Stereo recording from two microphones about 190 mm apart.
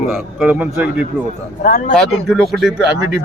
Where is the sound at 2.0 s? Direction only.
Centre (ahead or behind).